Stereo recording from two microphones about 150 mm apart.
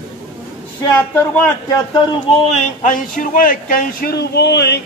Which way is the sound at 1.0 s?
10° left (ahead or behind).